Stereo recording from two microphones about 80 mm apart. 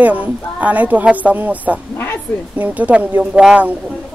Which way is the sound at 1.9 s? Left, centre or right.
Left.